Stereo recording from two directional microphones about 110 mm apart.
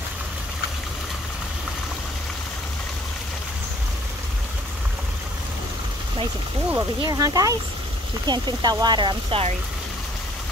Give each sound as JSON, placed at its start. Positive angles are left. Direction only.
{"t": 7.0, "sound": "speech", "side_deg": -35}